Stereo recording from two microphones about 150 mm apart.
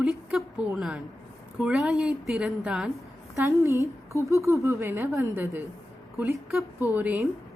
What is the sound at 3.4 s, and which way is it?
A woman's voice, 20° right (ahead or behind).